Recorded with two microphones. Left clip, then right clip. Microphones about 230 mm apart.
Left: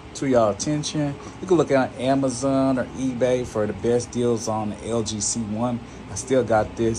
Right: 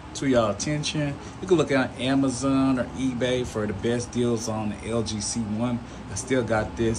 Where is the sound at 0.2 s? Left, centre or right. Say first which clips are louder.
Left 3 dB; left.